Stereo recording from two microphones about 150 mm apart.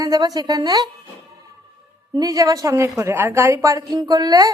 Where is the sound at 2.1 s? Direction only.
25° right (ahead or behind).